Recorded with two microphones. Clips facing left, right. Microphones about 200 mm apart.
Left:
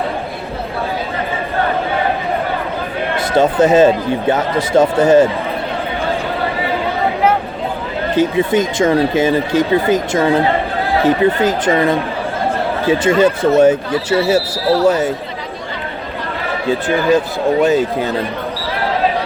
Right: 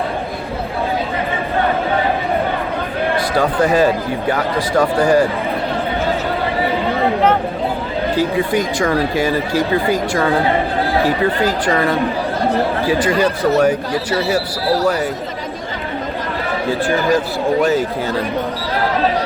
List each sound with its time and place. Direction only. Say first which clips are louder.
3.3 s speech: left 5 dB; 25° left (ahead or behind)
8.1 s speech: left 4 dB; 20° left (ahead or behind)
16.6 s speech: left 3 dB; 20° left (ahead or behind)